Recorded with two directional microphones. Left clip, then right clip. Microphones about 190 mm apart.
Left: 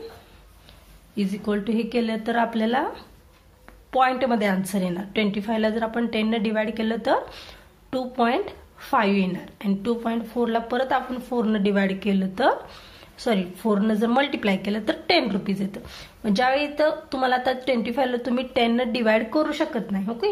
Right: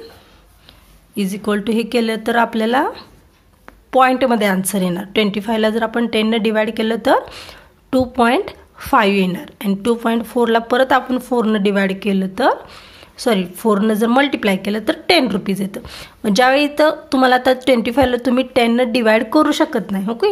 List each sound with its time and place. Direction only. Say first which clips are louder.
1.1 s a woman's voice: right 7 dB; 40° right (ahead or behind)